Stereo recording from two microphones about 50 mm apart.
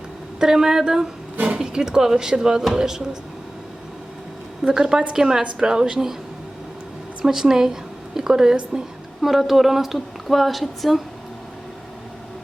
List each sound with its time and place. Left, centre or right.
0.3 s speech: centre
4.7 s speech: centre
7.2 s a woman's voice: centre